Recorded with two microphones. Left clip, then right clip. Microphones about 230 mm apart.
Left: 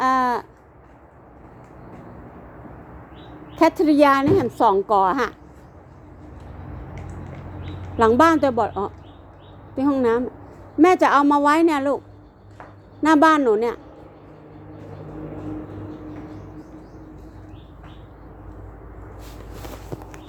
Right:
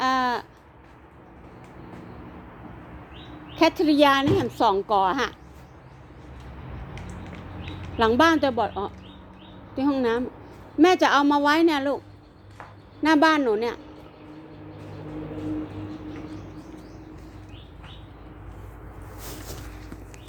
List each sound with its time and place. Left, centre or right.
0.0 s a sound: centre
3.5 s a woman's voice: centre
7.9 s a woman's voice: centre
13.0 s a woman's voice: centre